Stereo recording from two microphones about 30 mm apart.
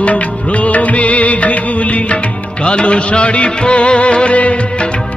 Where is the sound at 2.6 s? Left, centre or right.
Left.